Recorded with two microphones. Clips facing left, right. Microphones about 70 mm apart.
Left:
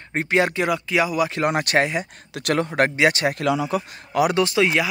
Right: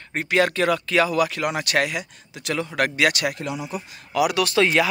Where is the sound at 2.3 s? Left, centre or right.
Left.